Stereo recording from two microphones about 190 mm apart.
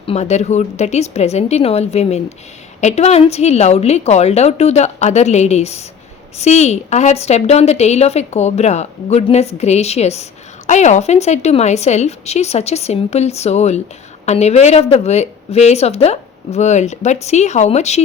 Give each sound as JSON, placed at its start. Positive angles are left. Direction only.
{"t": 0.1, "sound": "a woman's voice", "side_deg": 35}